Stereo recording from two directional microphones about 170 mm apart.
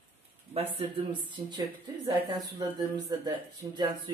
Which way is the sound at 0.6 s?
35° right (ahead or behind).